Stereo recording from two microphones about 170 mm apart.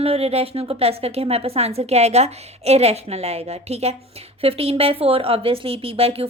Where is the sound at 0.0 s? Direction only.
35° right (ahead or behind).